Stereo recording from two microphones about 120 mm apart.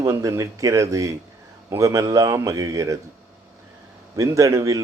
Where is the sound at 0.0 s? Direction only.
25° right (ahead or behind).